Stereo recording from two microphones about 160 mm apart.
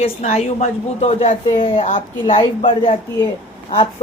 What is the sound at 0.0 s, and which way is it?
Speech, 45° left (ahead or behind).